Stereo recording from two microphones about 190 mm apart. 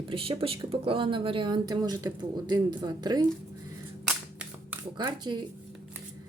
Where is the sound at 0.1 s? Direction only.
30° right (ahead or behind).